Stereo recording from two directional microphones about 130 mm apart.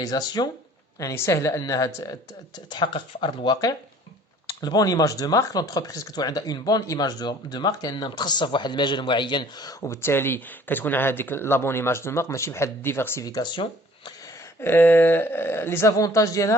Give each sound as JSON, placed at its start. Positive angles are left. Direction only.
{"t": 0.0, "sound": "speech", "side_deg": 30}
{"t": 2.6, "sound": "speech", "side_deg": 35}
{"t": 14.6, "sound": "speech", "side_deg": 15}